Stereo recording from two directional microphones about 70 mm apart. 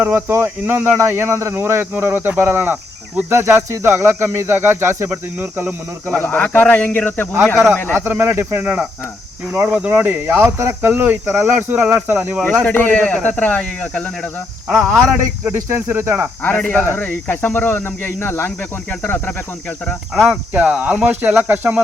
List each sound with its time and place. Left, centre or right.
0.0 s speech: right
6.1 s speech: left
7.4 s speech: centre
7.9 s speech: right
9.6 s speech: centre
12.6 s speech: left
14.7 s speech: centre
15.9 s speech: right
16.4 s speech: left
20.1 s speech: centre
20.5 s speech: right